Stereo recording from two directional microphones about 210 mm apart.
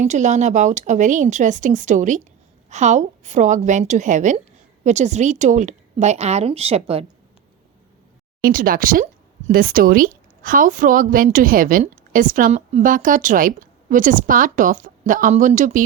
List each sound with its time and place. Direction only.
0.0 s speech: 35° right (ahead or behind)
8.4 s speech: 45° right (ahead or behind)